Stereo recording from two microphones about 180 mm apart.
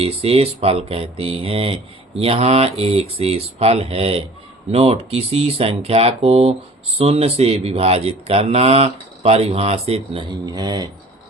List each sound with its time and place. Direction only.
0.0 s speech: 35° right (ahead or behind)